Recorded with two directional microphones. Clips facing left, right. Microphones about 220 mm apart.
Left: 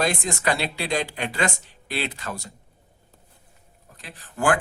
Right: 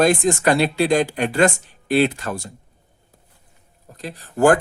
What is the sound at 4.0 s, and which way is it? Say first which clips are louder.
Speech: right 10 dB; 40° right (ahead or behind).